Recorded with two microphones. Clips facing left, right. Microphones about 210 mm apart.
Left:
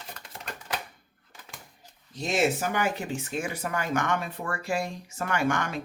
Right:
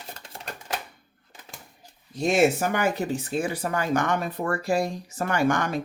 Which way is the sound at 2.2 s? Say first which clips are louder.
Right 5 dB; 50° right (ahead or behind).